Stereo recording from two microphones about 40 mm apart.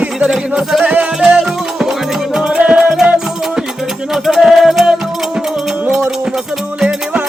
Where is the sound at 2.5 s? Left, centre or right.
Right.